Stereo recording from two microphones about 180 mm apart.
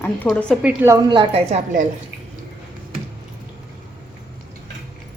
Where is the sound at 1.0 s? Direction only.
30° right (ahead or behind).